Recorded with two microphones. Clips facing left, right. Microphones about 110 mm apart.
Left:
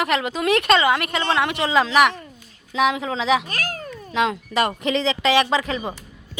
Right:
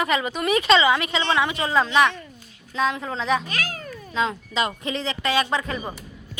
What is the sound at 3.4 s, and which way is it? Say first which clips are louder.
Speech: left 1 dB; 45° left (ahead or behind).